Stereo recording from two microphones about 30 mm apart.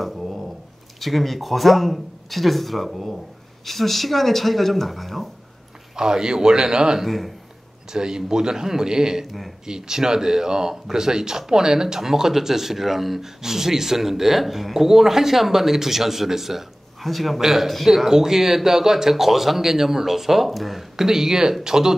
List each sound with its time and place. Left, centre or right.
1.0 s speech: centre
5.9 s a man's voice: right
7.1 s speech: centre
7.9 s a man's voice: right
9.2 s speech: centre
9.7 s speech: centre
20.9 s a man's voice: centre